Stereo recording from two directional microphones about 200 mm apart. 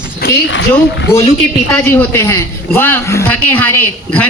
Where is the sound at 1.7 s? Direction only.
10° left (ahead or behind).